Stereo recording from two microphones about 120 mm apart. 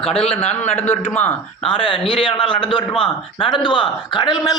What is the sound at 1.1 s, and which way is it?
Speech, 10° left (ahead or behind).